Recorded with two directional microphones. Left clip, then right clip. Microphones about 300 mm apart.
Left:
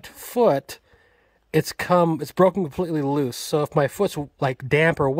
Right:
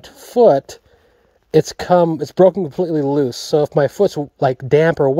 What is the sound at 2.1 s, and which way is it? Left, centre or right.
Speech, centre.